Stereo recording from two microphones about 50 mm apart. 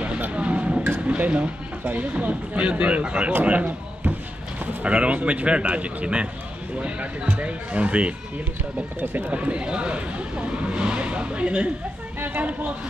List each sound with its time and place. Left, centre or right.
0.4 s vehicle: right
1.0 s speech: right
4.8 s speech: right
7.2 s speech: right
9.0 s speech: right
9.3 s speech: right